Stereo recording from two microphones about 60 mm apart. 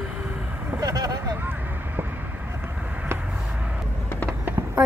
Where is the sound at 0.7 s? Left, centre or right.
Right.